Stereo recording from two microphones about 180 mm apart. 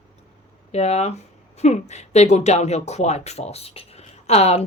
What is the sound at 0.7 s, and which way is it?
Speech, 35° left (ahead or behind).